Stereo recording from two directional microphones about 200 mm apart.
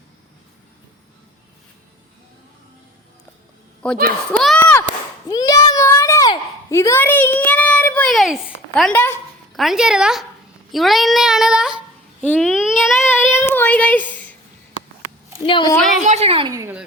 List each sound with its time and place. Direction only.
3.8 s speech: 5° left (ahead or behind)
4.3 s chop: 5° left (ahead or behind)
5.3 s a sound: 20° left (ahead or behind)
9.6 s speech: centre (ahead or behind)
12.2 s a sound: 5° left (ahead or behind)
13.0 s child singing: 15° left (ahead or behind)
15.4 s a woman's voice: 25° left (ahead or behind)
16.0 s a woman's voice: 35° right (ahead or behind)
16.5 s speech: 15° right (ahead or behind)